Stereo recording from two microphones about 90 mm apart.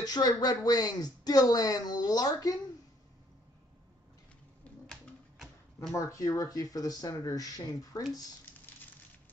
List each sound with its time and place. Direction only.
0.0 s speech: 45° left (ahead or behind)
4.7 s a sound: 15° left (ahead or behind)
5.9 s speech: 35° left (ahead or behind)